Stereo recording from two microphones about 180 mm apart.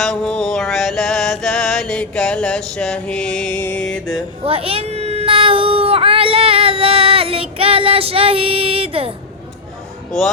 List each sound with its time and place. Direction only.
0.0 s mantra: 5° left (ahead or behind)
4.4 s baby cry: 30° right (ahead or behind)